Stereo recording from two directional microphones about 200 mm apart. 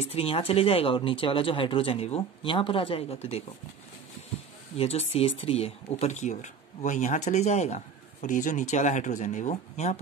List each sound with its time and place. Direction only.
0.1 s speech: 30° left (ahead or behind)
4.7 s speech: 30° left (ahead or behind)